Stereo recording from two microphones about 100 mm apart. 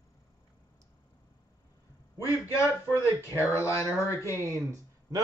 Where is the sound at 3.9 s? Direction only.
30° left (ahead or behind).